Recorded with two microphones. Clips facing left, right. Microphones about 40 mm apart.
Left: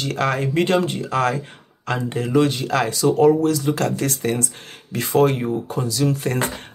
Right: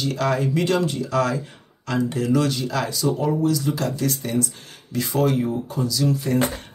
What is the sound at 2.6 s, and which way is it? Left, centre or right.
Speech, left.